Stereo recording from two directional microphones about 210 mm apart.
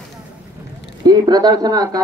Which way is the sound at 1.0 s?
20° right (ahead or behind).